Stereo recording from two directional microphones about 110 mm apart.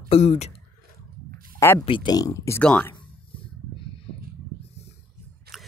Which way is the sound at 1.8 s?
50° left (ahead or behind).